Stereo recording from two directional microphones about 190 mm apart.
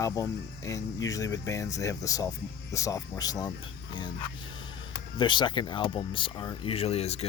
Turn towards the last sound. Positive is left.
turn(degrees=35)  # may be behind; listen again after turning